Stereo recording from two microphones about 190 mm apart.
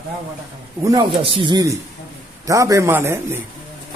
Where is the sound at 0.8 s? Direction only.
25° right (ahead or behind).